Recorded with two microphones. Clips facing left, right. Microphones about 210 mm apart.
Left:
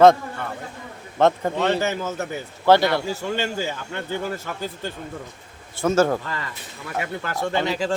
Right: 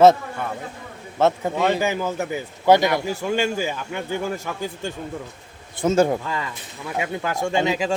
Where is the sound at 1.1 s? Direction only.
5° right (ahead or behind).